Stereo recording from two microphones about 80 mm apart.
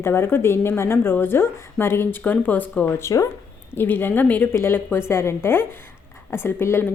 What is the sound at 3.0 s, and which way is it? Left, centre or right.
Speech, left.